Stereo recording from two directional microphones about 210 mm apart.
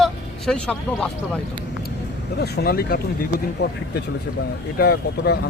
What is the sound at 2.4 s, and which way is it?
Speech, 50° left (ahead or behind).